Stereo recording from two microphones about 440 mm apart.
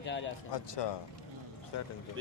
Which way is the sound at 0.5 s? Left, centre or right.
Left.